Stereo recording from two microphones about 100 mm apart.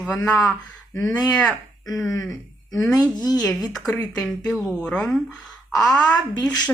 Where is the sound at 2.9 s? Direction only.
40° left (ahead or behind).